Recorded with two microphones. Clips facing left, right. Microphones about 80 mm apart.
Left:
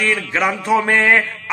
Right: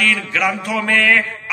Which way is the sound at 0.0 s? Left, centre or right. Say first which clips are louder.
Even; left.